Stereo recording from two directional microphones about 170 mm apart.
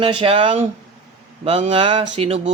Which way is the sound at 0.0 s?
30° right (ahead or behind).